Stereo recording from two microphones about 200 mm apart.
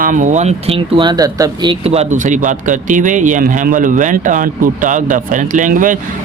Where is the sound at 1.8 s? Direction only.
30° right (ahead or behind).